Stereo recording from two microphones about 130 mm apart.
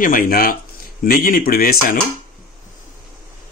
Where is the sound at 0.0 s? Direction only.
90° left.